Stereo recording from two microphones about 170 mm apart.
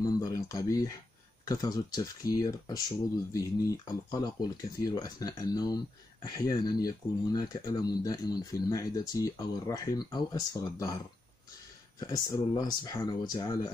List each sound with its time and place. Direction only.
0.0 s speech: 20° left (ahead or behind)
12.0 s speech: 20° left (ahead or behind)